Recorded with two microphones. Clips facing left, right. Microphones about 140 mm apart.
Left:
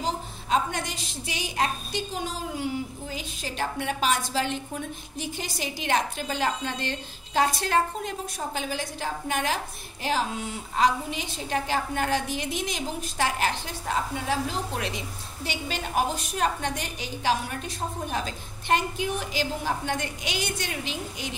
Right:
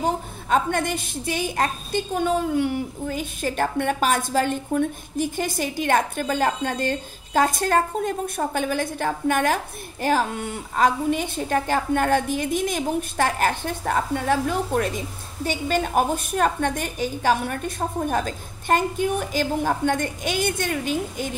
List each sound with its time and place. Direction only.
0.0 s a woman's voice: 55° right (ahead or behind)